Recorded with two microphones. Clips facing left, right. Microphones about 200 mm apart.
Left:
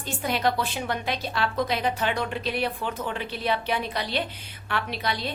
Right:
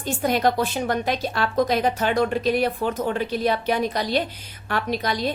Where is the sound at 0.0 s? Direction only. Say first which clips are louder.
Right 5 dB; 45° right (ahead or behind).